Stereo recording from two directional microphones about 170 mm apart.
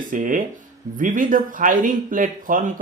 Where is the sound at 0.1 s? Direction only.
50° right (ahead or behind).